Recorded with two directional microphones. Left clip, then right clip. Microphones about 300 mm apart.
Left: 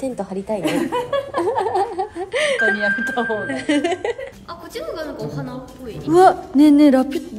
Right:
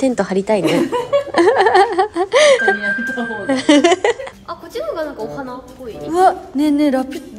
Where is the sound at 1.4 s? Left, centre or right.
Right.